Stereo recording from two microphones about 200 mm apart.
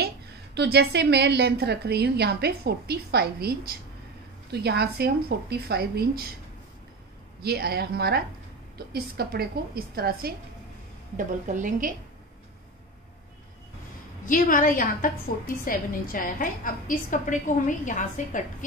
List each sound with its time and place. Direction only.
0.0 s a woman's voice: 55° right (ahead or behind)
7.4 s a woman's voice: 50° right (ahead or behind)
11.1 s a woman's voice: 40° right (ahead or behind)
14.2 s a woman's voice: 45° left (ahead or behind)